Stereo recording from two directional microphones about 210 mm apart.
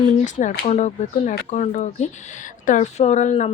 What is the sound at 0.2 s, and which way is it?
A woman's voice, 40° left (ahead or behind).